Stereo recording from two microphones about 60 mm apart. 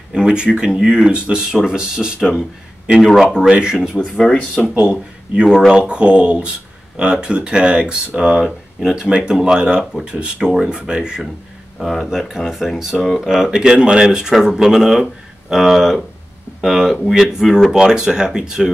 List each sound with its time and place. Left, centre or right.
0.1 s speech: centre
3.1 s speech: centre
3.3 s speech: centre
4.2 s speech: centre
4.7 s speech: centre
8.5 s speech: centre
11.8 s speech: centre